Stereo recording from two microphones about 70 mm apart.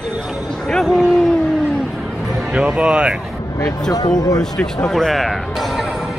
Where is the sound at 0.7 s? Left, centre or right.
Centre.